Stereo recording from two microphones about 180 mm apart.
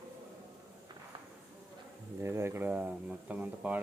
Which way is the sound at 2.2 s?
15° right (ahead or behind).